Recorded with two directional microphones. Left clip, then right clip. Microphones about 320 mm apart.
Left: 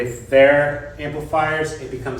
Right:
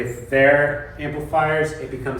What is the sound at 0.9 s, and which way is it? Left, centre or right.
Speech, left.